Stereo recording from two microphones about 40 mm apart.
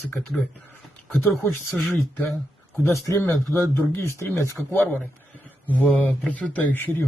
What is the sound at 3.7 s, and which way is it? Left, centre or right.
Speech, left.